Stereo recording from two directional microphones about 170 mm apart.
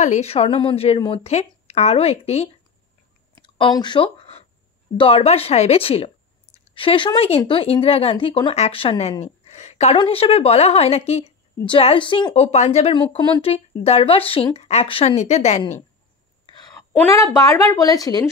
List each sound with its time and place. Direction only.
0.0 s speech: 40° left (ahead or behind)
3.4 s a sound: 30° left (ahead or behind)
4.9 s speech: 35° left (ahead or behind)
9.2 s a sound: 40° left (ahead or behind)
9.9 s a woman's voice: 35° left (ahead or behind)
12.4 s speech: 40° left (ahead or behind)
16.7 s a woman's voice: 15° left (ahead or behind)